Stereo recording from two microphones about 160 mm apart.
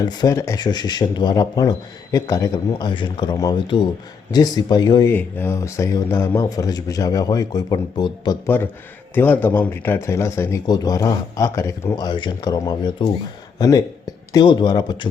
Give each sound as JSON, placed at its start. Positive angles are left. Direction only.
{"t": 0.0, "sound": "speech", "side_deg": 25}
{"t": 5.1, "sound": "speech", "side_deg": 15}
{"t": 8.4, "sound": "speech", "side_deg": 15}